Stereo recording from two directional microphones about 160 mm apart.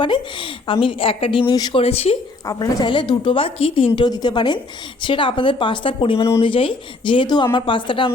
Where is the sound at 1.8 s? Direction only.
40° left (ahead or behind).